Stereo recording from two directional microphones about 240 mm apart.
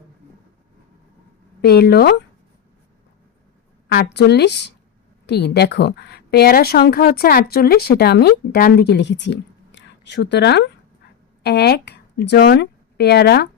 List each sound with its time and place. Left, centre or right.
1.6 s speech: left
3.9 s a woman's voice: left